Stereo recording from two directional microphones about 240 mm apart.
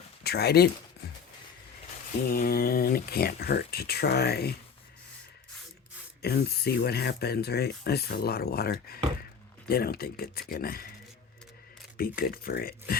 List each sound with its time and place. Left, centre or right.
0.3 s speech: left
2.3 s speech: left
6.2 s speech: left
11.9 s speech: left